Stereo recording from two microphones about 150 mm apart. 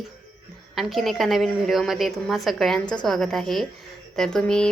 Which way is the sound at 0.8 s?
Centre (ahead or behind).